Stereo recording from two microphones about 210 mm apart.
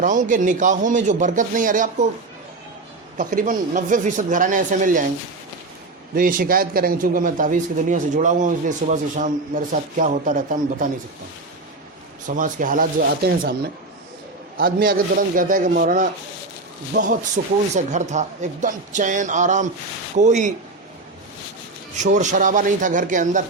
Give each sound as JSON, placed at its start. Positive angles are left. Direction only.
{"t": 0.0, "sound": "a man's voice", "side_deg": -40}
{"t": 3.2, "sound": "a man's voice", "side_deg": -40}
{"t": 6.1, "sound": "a man's voice", "side_deg": -40}
{"t": 12.3, "sound": "a man's voice", "side_deg": -40}
{"t": 14.6, "sound": "a man's voice", "side_deg": -45}
{"t": 21.9, "sound": "a man's voice", "side_deg": -35}